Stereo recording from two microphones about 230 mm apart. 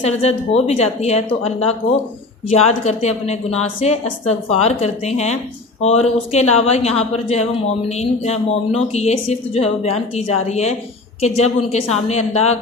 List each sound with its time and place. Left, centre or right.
0.0 s a woman's voice: left